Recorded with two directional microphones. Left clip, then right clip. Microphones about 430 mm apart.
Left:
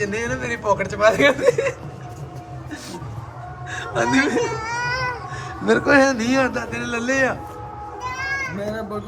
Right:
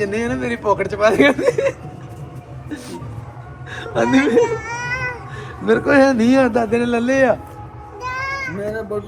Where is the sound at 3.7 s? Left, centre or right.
Centre.